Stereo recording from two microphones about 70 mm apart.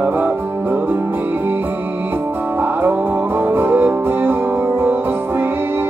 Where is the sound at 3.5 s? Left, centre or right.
Right.